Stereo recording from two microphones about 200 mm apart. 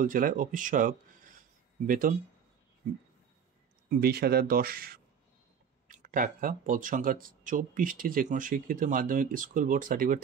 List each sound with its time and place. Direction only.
0.0 s speech: 45° right (ahead or behind)
4.0 s speech: 50° right (ahead or behind)